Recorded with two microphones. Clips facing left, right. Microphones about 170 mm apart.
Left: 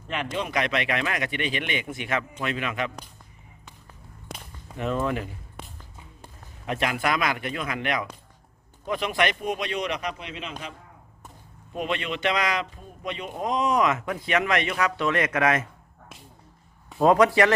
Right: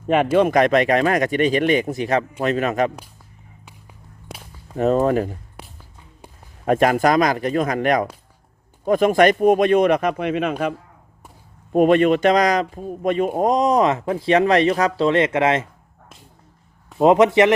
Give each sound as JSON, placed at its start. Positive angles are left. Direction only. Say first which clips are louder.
{"t": 0.3, "sound": "a man's voice", "louder": "right 11 dB", "side_deg": -50}
{"t": 4.8, "sound": "a man's voice", "louder": "right 10 dB", "side_deg": -40}
{"t": 6.7, "sound": "speech", "louder": "right 10 dB", "side_deg": -45}
{"t": 11.7, "sound": "a man's voice", "louder": "right 15 dB", "side_deg": -50}
{"t": 17.0, "sound": "speech", "louder": "right 5 dB", "side_deg": -20}